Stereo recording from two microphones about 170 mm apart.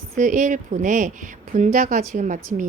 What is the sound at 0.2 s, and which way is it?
Speech, 50° right (ahead or behind).